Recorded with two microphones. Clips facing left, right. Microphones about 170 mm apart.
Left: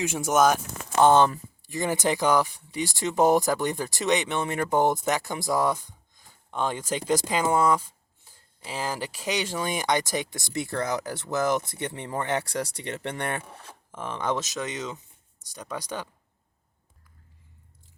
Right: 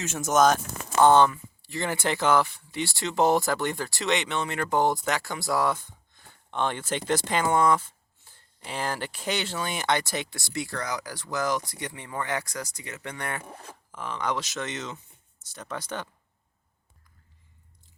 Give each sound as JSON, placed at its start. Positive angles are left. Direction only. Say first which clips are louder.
{"t": 0.0, "sound": "speech", "louder": "even", "side_deg": 10}